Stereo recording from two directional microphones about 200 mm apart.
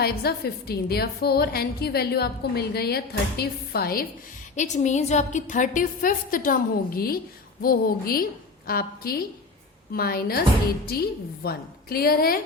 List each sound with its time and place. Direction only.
0.0 s a woman's voice: 50° left (ahead or behind)
4.5 s a woman's voice: 35° left (ahead or behind)